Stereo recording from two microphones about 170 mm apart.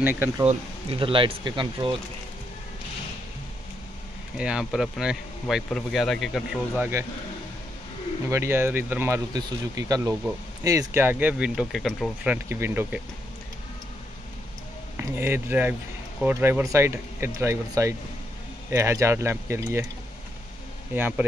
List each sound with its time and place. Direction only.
0.0 s speech: 10° right (ahead or behind)
0.5 s speech: 35° right (ahead or behind)
4.4 s speech: 5° right (ahead or behind)
8.3 s speech: 15° right (ahead or behind)
12.3 s speech: 15° right (ahead or behind)
15.0 s speech: 15° right (ahead or behind)
20.9 s speech: 10° right (ahead or behind)